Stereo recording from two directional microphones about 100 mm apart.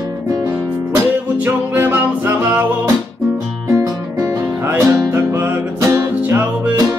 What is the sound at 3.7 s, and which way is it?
Music, 30° right (ahead or behind).